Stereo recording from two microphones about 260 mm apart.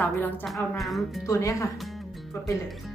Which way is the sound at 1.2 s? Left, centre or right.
Centre.